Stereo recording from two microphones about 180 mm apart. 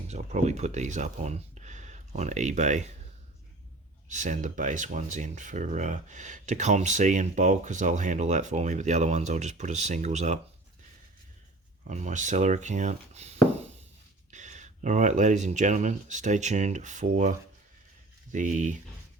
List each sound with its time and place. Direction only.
0.1 s speech: 40° right (ahead or behind)
4.1 s speech: 45° right (ahead or behind)
11.9 s speech: 40° right (ahead or behind)